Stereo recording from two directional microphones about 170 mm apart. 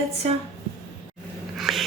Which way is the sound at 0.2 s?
40° right (ahead or behind).